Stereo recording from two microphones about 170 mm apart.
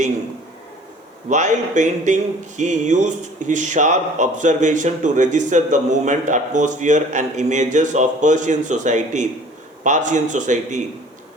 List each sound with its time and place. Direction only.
1.3 s speech: 45° right (ahead or behind)